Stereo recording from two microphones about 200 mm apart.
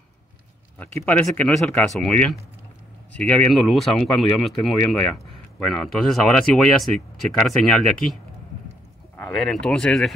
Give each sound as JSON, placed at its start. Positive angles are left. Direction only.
{"t": 1.0, "sound": "speech", "side_deg": 10}